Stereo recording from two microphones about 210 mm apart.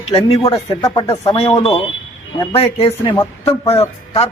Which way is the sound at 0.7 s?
15° left (ahead or behind).